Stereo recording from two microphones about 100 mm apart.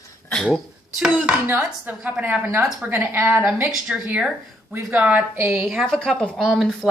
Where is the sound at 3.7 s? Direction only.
10° right (ahead or behind).